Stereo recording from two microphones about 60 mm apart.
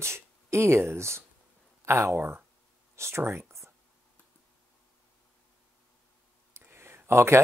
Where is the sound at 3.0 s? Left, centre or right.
Right.